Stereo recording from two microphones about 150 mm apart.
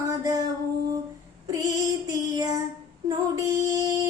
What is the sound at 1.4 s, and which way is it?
Female singing, 25° right (ahead or behind).